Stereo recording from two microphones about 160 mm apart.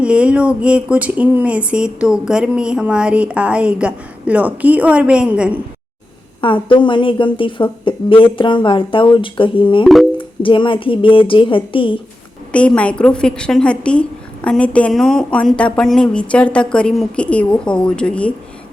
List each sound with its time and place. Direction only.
0.0 s speech: 5° right (ahead or behind)
6.4 s a woman's voice: 30° left (ahead or behind)
9.8 s music: centre (ahead or behind)
10.2 s a woman's voice: 30° left (ahead or behind)
12.5 s a woman's voice: 10° left (ahead or behind)